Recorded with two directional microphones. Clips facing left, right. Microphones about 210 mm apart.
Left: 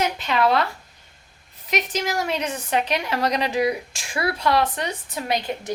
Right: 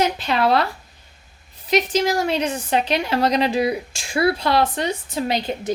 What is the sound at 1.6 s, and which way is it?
A woman's voice, 30° right (ahead or behind).